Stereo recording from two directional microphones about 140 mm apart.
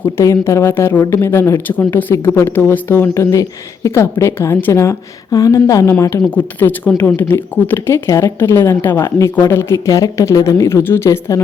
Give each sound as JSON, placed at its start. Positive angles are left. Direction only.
{"t": 0.0, "sound": "speech", "side_deg": 20}